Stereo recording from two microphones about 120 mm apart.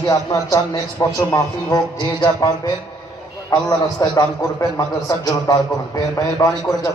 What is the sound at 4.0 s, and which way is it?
A man's voice, 30° left (ahead or behind).